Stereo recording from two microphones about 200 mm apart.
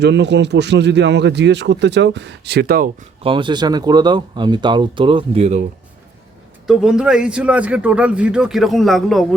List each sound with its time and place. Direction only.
0.0 s speech: 60° right (ahead or behind)
3.2 s speech: 25° right (ahead or behind)
6.7 s speech: 5° right (ahead or behind)